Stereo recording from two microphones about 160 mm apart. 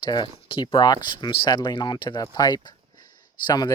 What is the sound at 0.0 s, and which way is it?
Speech, 30° left (ahead or behind).